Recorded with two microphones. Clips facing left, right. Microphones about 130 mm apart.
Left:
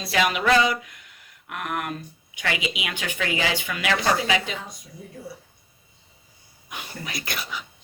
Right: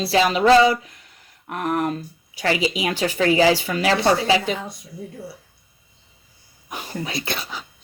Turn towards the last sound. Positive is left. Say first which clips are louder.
# right 4 dB
turn(degrees=-25)  # may be behind; listen again after turning